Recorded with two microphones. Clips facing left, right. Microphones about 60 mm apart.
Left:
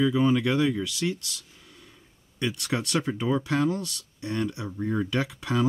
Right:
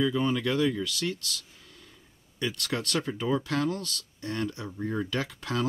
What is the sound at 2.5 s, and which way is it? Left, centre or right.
Speech, centre.